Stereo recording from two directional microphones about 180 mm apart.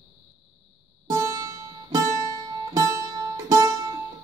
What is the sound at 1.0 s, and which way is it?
Music, 20° right (ahead or behind).